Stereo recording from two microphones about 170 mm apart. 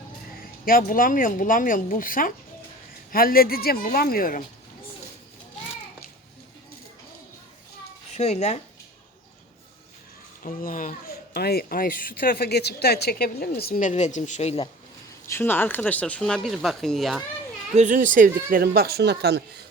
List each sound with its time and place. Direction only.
0.3 s speech: 60° left (ahead or behind)
8.1 s speech: 40° left (ahead or behind)
10.4 s speech: 55° left (ahead or behind); by 14.7 s 35° left (ahead or behind)
15.3 s speech: 10° left (ahead or behind)
17.7 s speech: 50° right (ahead or behind); by 19.6 s 75° right (ahead or behind)